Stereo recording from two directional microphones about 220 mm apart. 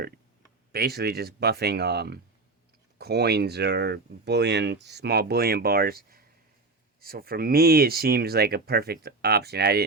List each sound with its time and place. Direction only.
0.7 s speech: 45° right (ahead or behind)